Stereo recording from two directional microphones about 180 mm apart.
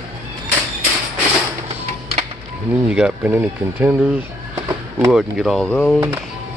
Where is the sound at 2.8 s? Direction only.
5° right (ahead or behind).